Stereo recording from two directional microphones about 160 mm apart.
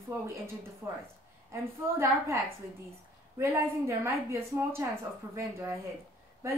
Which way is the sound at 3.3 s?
15° right (ahead or behind).